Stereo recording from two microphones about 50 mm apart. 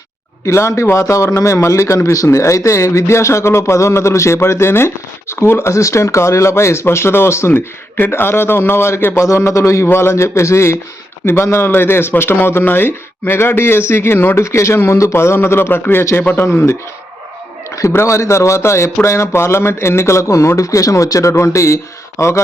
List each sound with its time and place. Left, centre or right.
0.4 s speech: left
9.2 s speech: left
9.9 s speech: left
11.3 s speech: left
14.4 s speech: left
14.8 s speech: left
17.9 s speech: left
22.2 s speech: left